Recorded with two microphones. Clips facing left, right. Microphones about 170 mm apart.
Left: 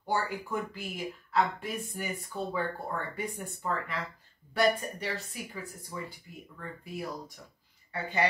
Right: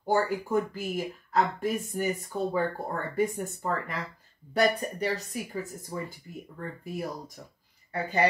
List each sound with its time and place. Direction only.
0.0 s a woman's voice: 45° right (ahead or behind)